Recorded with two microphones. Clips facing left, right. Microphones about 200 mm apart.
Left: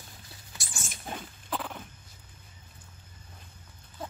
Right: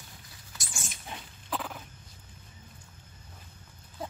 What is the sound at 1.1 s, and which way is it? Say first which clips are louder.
Rodents: left 6 dB; 45° left (ahead or behind).